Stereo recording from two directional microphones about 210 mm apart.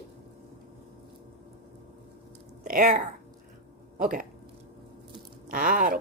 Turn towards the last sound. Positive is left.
turn(degrees=-40)  # may be behind; listen again after turning